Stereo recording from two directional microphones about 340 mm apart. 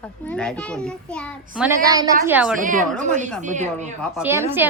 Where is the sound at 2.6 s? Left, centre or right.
Right.